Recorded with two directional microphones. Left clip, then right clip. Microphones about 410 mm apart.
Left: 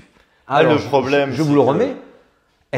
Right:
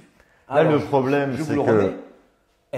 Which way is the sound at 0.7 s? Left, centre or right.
Centre.